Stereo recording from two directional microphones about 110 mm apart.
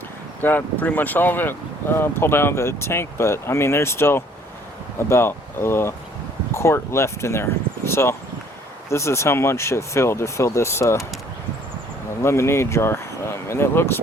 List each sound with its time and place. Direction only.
0.4 s speech: 15° left (ahead or behind)
12.2 s speech: 25° left (ahead or behind)